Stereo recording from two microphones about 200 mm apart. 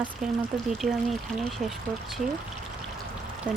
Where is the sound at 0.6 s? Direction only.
Centre (ahead or behind).